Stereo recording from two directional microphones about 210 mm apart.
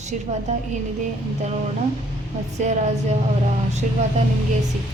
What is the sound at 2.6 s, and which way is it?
Speech, 35° right (ahead or behind).